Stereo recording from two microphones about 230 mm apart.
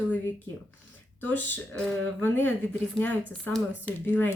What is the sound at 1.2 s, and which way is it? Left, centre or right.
Speech, centre.